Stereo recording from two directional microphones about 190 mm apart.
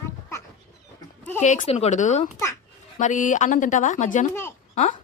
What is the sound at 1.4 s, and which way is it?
Speech, 35° left (ahead or behind).